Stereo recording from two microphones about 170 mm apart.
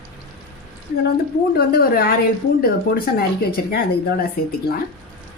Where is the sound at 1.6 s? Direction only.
60° left (ahead or behind).